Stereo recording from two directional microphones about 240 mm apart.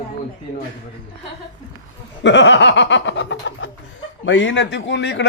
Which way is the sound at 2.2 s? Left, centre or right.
Left.